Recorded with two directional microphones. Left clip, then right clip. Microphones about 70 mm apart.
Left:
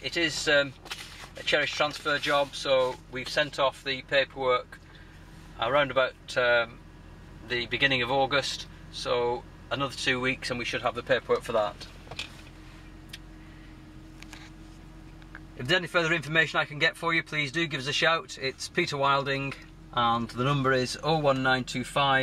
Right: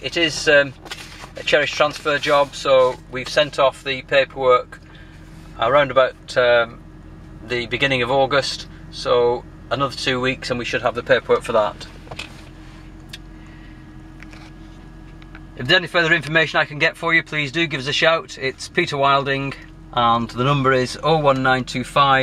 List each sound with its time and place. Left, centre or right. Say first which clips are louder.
0.0 s speech: right 9 dB; centre
0.8 s whip: right 6 dB; centre
2.1 s speech: right 10 dB; centre
3.1 s speech: right 9 dB; right; by 11.9 s centre
15.6 s speech: right 9 dB; centre
16.3 s speech: right 8 dB; centre